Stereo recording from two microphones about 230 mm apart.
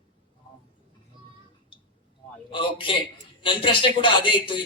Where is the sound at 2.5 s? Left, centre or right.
Left.